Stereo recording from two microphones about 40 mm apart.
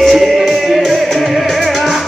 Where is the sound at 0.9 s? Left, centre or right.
Centre.